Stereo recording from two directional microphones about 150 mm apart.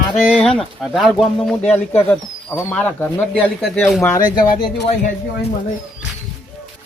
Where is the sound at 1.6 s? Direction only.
45° left (ahead or behind).